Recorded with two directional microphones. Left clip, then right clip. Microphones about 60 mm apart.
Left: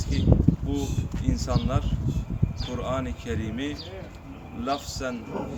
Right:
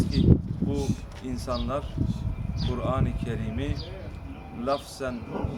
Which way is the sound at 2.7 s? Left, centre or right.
Right.